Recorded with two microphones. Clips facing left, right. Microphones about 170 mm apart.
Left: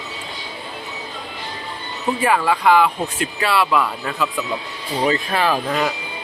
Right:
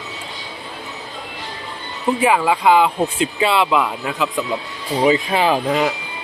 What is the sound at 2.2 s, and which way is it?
Speech, 15° right (ahead or behind).